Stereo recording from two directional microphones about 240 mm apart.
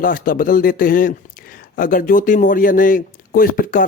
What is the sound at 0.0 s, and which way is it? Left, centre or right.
Speech, left.